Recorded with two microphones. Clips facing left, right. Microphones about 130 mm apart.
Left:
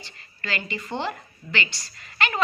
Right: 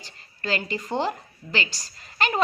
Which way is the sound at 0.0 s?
40° right (ahead or behind).